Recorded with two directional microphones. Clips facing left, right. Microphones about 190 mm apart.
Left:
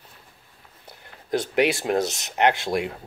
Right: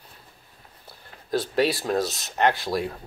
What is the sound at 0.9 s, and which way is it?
Speech, 20° left (ahead or behind).